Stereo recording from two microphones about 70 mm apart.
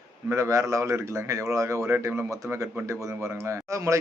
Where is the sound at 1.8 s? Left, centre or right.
Right.